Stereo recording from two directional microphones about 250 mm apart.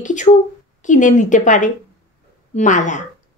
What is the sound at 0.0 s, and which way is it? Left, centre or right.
A woman's voice, left.